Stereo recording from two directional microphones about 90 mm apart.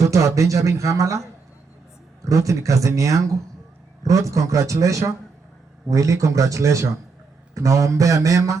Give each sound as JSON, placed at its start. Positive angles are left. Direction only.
{"t": 0.0, "sound": "speech", "side_deg": -35}
{"t": 2.2, "sound": "speech", "side_deg": -35}